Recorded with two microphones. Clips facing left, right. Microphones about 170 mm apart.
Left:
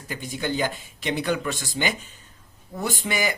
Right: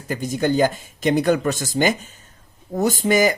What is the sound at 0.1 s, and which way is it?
Speech, 45° right (ahead or behind).